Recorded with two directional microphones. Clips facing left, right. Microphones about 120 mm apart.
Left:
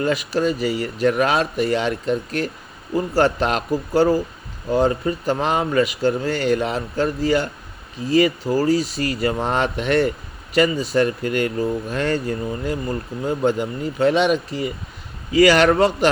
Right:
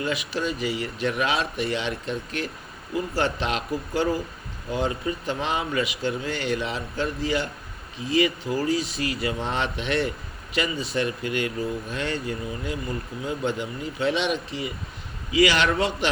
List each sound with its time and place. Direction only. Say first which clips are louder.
0.0 s speech: left 7 dB; 45° left (ahead or behind)